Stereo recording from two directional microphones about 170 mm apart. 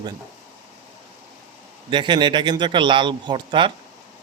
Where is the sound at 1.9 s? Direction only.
30° right (ahead or behind).